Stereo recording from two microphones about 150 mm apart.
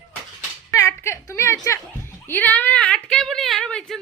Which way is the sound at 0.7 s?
20° left (ahead or behind).